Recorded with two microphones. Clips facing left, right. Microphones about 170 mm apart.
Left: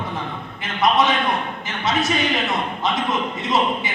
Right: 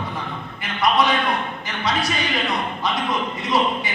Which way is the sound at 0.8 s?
20° left (ahead or behind).